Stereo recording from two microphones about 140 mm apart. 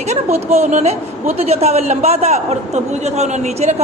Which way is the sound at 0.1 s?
50° right (ahead or behind).